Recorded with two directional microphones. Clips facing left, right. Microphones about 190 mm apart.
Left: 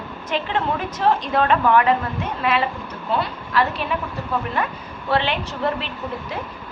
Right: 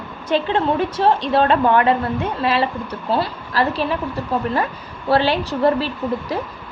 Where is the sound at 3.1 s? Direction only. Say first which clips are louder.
Right 1 dB; 35° right (ahead or behind).